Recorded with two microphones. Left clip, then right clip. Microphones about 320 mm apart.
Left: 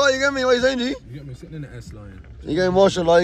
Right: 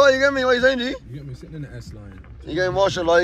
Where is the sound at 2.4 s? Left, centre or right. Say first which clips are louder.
Left 3 dB; left.